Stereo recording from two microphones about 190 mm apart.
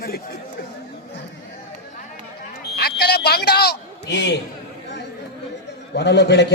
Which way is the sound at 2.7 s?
55° left (ahead or behind).